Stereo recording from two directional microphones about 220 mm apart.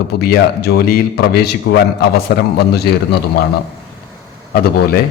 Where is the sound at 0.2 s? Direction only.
45° left (ahead or behind).